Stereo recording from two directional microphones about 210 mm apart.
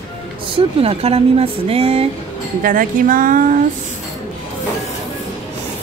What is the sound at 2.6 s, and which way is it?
Speech, 40° right (ahead or behind).